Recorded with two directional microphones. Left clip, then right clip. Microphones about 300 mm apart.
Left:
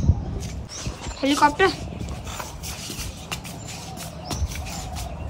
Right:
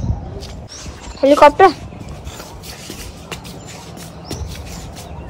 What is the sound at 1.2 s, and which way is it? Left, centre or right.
Speech, centre.